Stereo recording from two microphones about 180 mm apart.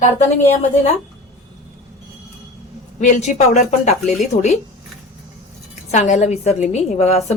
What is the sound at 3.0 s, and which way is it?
A woman's voice, 45° left (ahead or behind).